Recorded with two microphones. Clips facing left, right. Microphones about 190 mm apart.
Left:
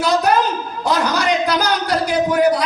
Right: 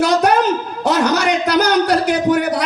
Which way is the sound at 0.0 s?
70° right (ahead or behind).